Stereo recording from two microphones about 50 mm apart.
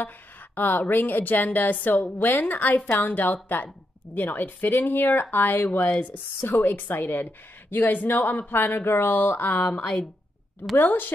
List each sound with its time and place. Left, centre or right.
0.6 s speech: left
9.6 s speech: left
10.8 s speech: left